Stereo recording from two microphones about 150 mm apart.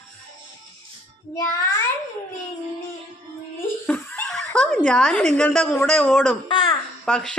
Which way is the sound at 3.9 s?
10° left (ahead or behind).